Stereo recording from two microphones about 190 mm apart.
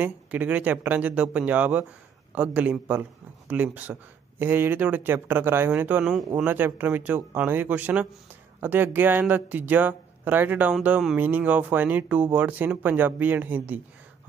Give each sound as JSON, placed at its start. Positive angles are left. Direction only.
{"t": 0.0, "sound": "speech", "side_deg": -10}